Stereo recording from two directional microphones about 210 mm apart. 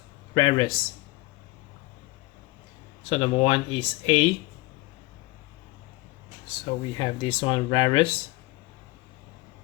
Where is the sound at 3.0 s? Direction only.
30° left (ahead or behind).